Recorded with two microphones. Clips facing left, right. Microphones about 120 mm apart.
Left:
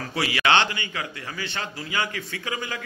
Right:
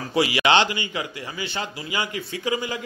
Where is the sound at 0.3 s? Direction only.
15° right (ahead or behind).